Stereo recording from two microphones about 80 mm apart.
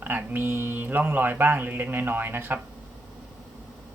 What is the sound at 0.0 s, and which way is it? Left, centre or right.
Speech, right.